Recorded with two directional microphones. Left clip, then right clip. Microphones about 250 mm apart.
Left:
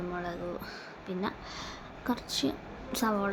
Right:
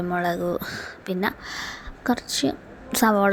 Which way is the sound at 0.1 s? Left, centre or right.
Right.